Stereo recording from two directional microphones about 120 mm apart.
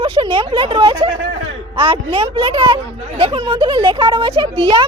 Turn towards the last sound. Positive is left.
turn(degrees=-50)  # may be behind; listen again after turning